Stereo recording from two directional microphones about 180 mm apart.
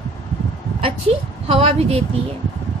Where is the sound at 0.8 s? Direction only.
35° right (ahead or behind).